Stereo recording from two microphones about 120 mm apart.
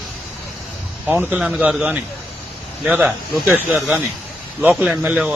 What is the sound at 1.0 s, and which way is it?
A man's voice, 10° right (ahead or behind).